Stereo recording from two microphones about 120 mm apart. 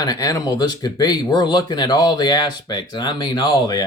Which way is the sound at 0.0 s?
30° left (ahead or behind).